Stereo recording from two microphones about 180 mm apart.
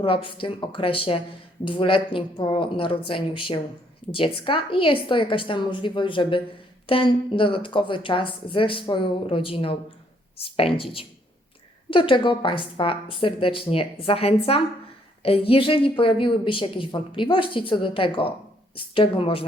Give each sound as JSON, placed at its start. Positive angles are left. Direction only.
{"t": 0.0, "sound": "a woman's voice", "side_deg": 30}